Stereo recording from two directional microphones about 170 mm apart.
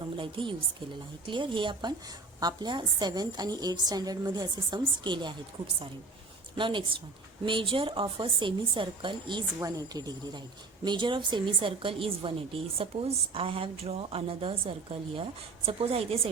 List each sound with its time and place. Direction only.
0.2 s a woman's voice: 30° right (ahead or behind)
6.6 s a woman's voice: 30° right (ahead or behind)